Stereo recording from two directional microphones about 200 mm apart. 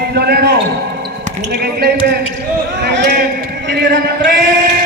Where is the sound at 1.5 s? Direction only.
50° right (ahead or behind).